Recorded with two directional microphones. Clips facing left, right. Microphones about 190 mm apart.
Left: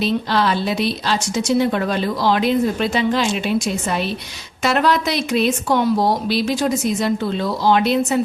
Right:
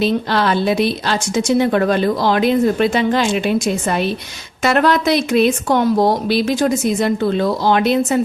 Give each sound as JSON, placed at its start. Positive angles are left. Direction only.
{"t": 0.0, "sound": "a woman's voice", "side_deg": -55}